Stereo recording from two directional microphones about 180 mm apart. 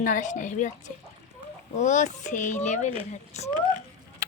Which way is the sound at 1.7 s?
45° left (ahead or behind).